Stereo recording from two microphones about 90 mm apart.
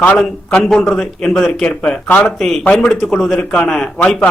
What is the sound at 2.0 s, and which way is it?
A man's voice, 20° left (ahead or behind).